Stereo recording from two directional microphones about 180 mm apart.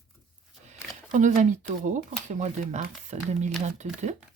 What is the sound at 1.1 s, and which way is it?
Speech, 40° right (ahead or behind).